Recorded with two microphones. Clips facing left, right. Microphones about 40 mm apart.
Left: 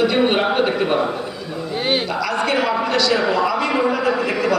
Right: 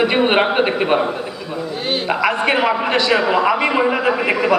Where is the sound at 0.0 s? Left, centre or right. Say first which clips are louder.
Right 2 dB; right.